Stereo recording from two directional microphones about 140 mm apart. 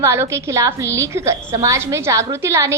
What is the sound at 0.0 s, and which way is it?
A woman's voice, 20° right (ahead or behind).